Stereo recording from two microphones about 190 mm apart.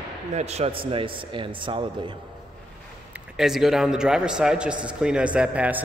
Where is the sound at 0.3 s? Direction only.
35° right (ahead or behind).